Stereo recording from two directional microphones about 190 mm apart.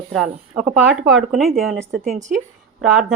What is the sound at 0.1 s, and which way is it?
Speech, centre (ahead or behind).